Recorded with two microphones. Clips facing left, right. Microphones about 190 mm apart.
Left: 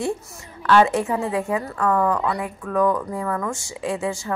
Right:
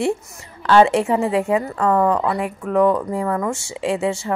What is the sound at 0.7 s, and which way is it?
Speech, 25° right (ahead or behind).